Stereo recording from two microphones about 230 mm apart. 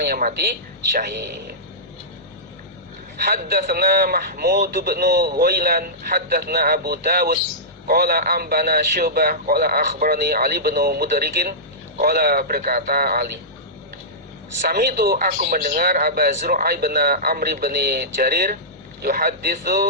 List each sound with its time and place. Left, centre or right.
0.0 s speech: right
3.2 s speech: right
14.7 s speech: right